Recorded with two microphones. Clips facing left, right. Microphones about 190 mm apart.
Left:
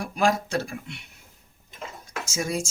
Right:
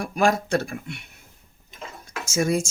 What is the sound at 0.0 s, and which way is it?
Speech, 50° right (ahead or behind).